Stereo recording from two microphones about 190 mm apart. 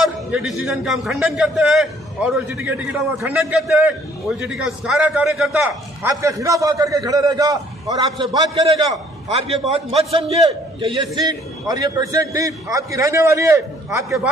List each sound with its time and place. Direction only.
0.5 s a man's voice: centre (ahead or behind)